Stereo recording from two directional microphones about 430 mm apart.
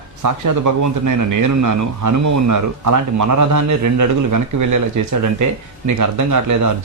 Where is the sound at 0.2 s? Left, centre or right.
Right.